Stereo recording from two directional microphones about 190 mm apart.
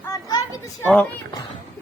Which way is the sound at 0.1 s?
15° left (ahead or behind).